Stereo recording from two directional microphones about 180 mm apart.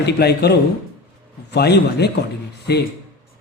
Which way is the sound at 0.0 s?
65° left (ahead or behind).